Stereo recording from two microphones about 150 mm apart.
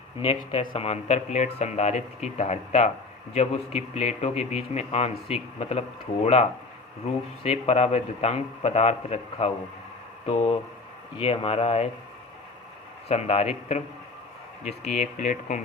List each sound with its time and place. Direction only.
0.2 s speech: 40° left (ahead or behind)
13.1 s speech: 45° left (ahead or behind)